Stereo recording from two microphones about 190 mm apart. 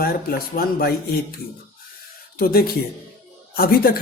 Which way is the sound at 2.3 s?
50° left (ahead or behind).